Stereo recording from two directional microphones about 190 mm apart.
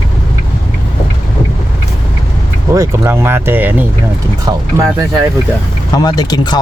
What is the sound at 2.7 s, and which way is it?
Speech, 15° right (ahead or behind).